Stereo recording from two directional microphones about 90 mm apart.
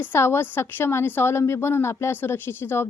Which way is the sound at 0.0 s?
25° left (ahead or behind).